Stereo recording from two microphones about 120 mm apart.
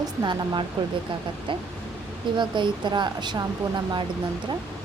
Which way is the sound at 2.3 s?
40° right (ahead or behind).